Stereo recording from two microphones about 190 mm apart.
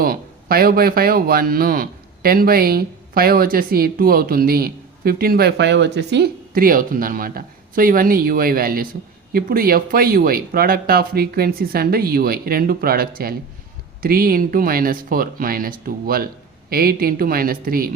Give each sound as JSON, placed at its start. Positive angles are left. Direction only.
{"t": 0.0, "sound": "speech", "side_deg": -50}